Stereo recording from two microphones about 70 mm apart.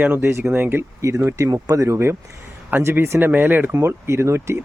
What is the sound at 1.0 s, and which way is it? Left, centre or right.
Speech, right.